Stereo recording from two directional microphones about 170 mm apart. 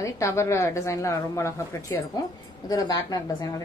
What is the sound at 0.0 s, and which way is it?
A woman's voice, 15° left (ahead or behind).